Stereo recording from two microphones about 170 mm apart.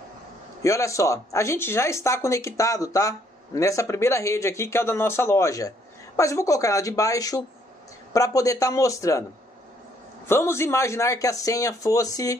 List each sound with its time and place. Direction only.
0.6 s speech: 20° left (ahead or behind)
10.2 s speech: 15° left (ahead or behind)